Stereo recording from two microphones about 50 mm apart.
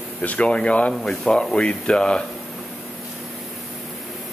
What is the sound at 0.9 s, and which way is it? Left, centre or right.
Speech, centre.